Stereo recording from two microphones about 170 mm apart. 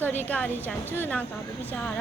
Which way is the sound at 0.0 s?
10° left (ahead or behind).